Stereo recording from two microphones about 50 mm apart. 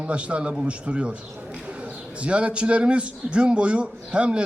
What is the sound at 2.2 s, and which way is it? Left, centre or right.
A man's voice, right.